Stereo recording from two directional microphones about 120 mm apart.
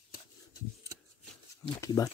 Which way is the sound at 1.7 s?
25° left (ahead or behind).